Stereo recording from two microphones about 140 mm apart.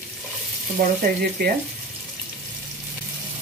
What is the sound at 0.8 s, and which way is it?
Speech, 90° right.